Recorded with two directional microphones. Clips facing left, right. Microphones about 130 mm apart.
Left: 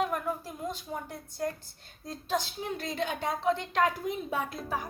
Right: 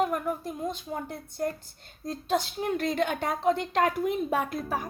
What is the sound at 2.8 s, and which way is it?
A woman's voice, 60° right (ahead or behind).